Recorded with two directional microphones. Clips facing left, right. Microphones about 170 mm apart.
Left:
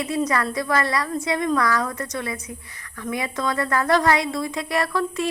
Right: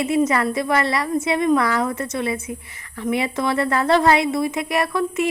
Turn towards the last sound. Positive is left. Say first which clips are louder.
# right 3 dB
turn(degrees=-20)  # may be behind; listen again after turning